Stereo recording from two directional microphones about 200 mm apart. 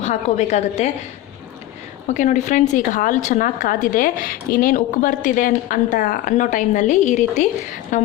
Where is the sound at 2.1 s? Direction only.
40° left (ahead or behind).